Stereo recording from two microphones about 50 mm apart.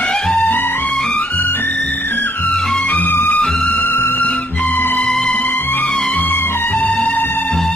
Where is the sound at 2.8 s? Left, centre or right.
Left.